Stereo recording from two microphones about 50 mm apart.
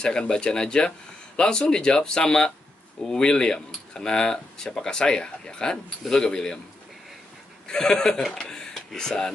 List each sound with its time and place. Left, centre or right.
0.0 s speech: centre
7.6 s speech: centre